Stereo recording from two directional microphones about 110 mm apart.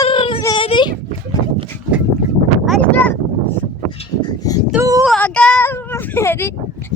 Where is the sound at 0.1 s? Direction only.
50° left (ahead or behind).